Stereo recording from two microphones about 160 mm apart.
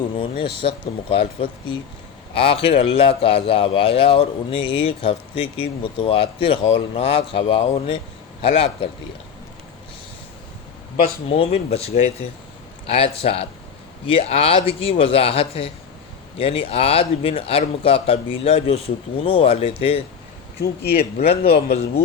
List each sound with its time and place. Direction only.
0.2 s a man's voice: 35° left (ahead or behind)
11.3 s a man's voice: 40° left (ahead or behind)
20.6 s speech: 80° left
21.2 s a man's voice: 40° left (ahead or behind)